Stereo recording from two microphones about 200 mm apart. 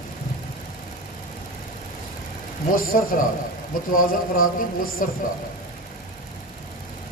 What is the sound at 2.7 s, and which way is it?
Speech, 45° left (ahead or behind).